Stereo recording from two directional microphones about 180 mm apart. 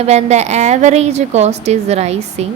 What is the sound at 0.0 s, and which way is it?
A woman's voice, 40° right (ahead or behind).